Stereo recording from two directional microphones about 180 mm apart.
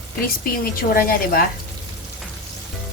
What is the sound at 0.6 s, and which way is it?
Speech, 55° left (ahead or behind).